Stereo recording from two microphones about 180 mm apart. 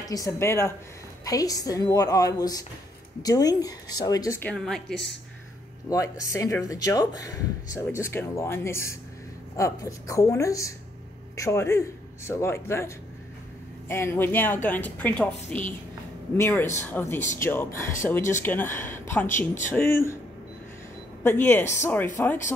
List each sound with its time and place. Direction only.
0.1 s a woman's voice: 15° left (ahead or behind)
5.9 s speech: 20° left (ahead or behind)
21.2 s speech: 15° left (ahead or behind)